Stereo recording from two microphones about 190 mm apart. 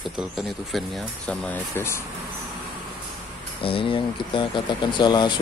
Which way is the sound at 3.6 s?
30° left (ahead or behind).